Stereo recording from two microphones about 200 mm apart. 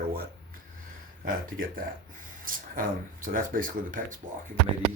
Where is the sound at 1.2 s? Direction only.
45° right (ahead or behind).